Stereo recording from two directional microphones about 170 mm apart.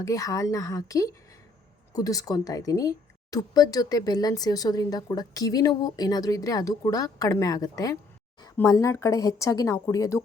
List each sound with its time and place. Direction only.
0.0 s speech: 20° left (ahead or behind)